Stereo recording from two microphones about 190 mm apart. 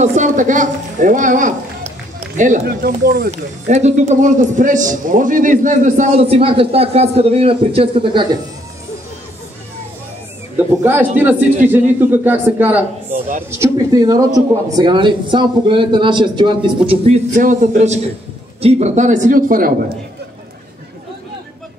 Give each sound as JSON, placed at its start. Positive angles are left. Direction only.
{"t": 0.0, "sound": "a woman's voice", "side_deg": -40}
{"t": 10.8, "sound": "a man's voice", "side_deg": -10}